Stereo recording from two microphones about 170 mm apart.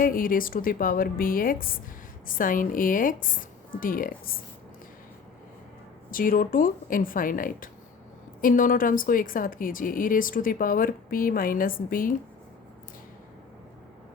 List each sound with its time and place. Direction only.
0.0 s a woman's voice: 55° left (ahead or behind)
6.1 s a woman's voice: 55° left (ahead or behind)